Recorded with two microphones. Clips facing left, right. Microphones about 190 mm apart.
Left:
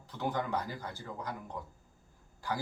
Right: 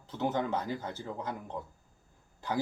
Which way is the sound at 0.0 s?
20° right (ahead or behind).